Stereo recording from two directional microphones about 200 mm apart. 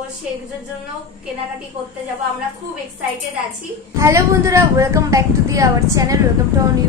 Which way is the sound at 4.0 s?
15° right (ahead or behind).